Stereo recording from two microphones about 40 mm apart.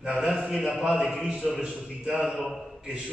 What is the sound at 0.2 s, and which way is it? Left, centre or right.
A man's voice, centre.